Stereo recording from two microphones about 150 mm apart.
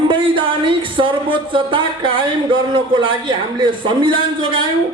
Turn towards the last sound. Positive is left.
turn(degrees=-35)  # may be behind; listen again after turning